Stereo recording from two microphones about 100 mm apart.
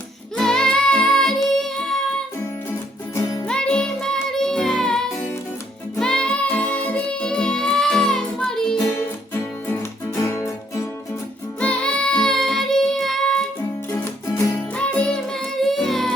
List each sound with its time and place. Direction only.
0.3 s child singing: 5° left (ahead or behind)
3.4 s music: 10° left (ahead or behind)
8.9 s music: 25° left (ahead or behind)
11.6 s child singing: 10° left (ahead or behind)
13.9 s music: 30° left (ahead or behind)
14.8 s music: 10° left (ahead or behind)